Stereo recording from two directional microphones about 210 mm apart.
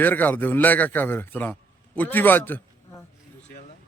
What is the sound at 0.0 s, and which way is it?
A man's voice, 10° left (ahead or behind).